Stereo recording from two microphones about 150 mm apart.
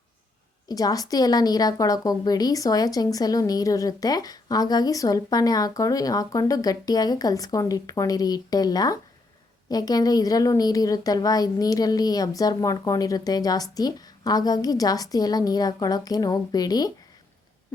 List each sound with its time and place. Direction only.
0.7 s a woman's voice: 25° left (ahead or behind)